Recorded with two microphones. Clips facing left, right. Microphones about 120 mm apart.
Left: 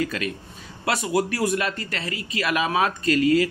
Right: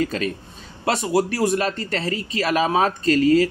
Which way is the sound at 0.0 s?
35° right (ahead or behind).